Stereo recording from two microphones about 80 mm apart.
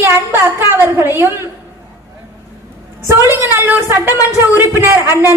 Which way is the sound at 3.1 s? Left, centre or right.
Right.